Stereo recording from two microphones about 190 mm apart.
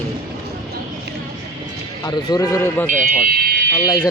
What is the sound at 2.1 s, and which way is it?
Speech, 20° left (ahead or behind).